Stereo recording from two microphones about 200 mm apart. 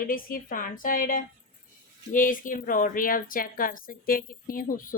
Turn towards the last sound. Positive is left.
turn(degrees=45)  # may be behind; listen again after turning